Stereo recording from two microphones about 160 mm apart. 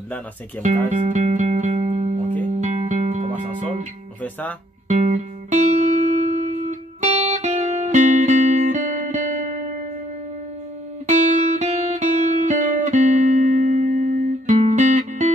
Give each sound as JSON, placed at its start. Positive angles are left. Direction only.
{"t": 0.6, "sound": "music", "side_deg": -50}
{"t": 4.2, "sound": "speech", "side_deg": 10}
{"t": 4.8, "sound": "music", "side_deg": -45}
{"t": 11.1, "sound": "music", "side_deg": -50}